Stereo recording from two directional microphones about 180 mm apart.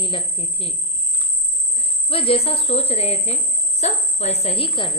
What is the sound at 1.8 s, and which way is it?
A woman's voice, 30° left (ahead or behind).